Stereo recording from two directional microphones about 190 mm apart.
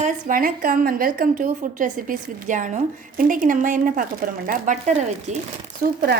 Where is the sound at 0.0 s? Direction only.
45° right (ahead or behind).